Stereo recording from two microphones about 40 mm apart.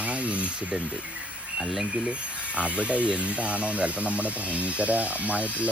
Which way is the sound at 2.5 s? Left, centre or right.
Right.